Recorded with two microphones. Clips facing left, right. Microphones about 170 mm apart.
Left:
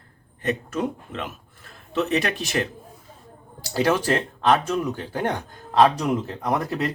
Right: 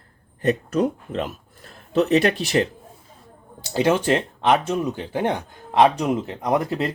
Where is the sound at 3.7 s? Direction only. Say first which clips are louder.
Right 2 dB; 20° right (ahead or behind).